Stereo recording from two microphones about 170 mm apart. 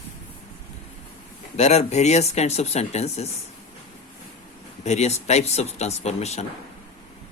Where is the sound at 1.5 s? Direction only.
40° left (ahead or behind).